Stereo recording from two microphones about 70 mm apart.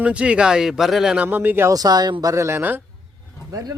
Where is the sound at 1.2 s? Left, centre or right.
Right.